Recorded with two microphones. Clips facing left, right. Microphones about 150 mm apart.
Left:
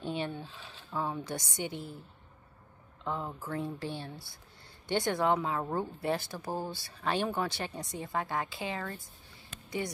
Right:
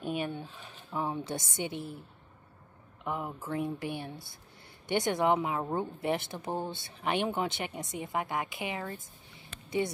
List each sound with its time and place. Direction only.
0.9 s a woman's voice: 20° right (ahead or behind)
3.0 s a woman's voice: 15° right (ahead or behind)